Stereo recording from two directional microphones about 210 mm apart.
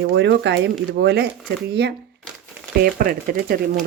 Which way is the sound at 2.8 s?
45° right (ahead or behind).